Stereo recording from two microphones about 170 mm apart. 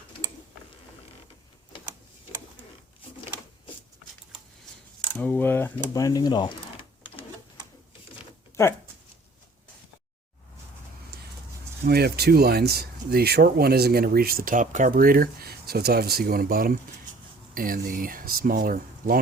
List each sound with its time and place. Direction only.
5.1 s speech: 10° left (ahead or behind)
5.9 s speech: 20° left (ahead or behind)
11.1 s vehicle: 70° right (ahead or behind)
11.9 s speech: 70° right (ahead or behind)